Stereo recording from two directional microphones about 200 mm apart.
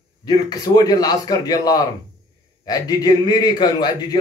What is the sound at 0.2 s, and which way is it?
A man's voice, 20° left (ahead or behind).